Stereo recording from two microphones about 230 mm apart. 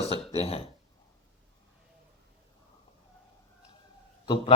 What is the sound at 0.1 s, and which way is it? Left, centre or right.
Burping, left.